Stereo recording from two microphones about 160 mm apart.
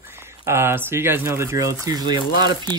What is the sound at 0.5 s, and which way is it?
Speech, 15° right (ahead or behind).